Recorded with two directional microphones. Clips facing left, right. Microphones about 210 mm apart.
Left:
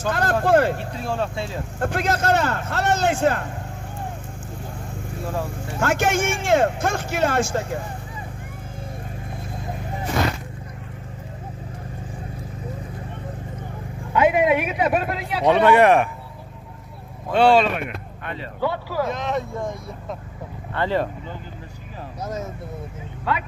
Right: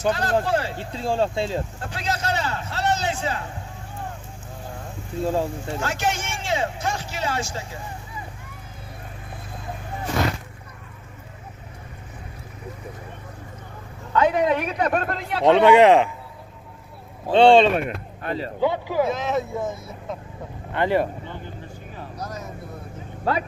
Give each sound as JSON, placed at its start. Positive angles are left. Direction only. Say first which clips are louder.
{"t": 0.1, "sound": "speech", "louder": "left 7 dB", "side_deg": 50}
{"t": 0.7, "sound": "speech", "louder": "right 2 dB", "side_deg": -30}
{"t": 1.8, "sound": "speech", "louder": "left 6 dB", "side_deg": 50}
{"t": 5.8, "sound": "speech", "louder": "left 7 dB", "side_deg": 50}
{"t": 14.1, "sound": "a man's voice", "louder": "left 2 dB", "side_deg": 10}
{"t": 15.6, "sound": "speech", "louder": "right 1 dB", "side_deg": -15}
{"t": 17.3, "sound": "speech", "louder": "right 3 dB", "side_deg": -25}
{"t": 18.6, "sound": "speech", "louder": "right 2 dB", "side_deg": -20}
{"t": 19.0, "sound": "a man's voice", "louder": "right 1 dB", "side_deg": -5}
{"t": 20.7, "sound": "speech", "louder": "right 2 dB", "side_deg": -15}
{"t": 22.2, "sound": "vehicle", "louder": "left 5 dB", "side_deg": 25}
{"t": 23.3, "sound": "speech", "louder": "right 2 dB", "side_deg": -40}